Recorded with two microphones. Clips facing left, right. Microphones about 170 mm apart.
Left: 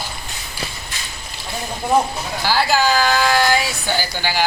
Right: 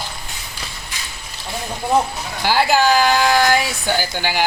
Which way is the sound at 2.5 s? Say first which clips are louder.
Right 2 dB; 15° right (ahead or behind).